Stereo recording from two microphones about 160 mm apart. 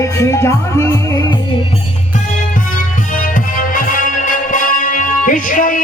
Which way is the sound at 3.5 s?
60° left (ahead or behind).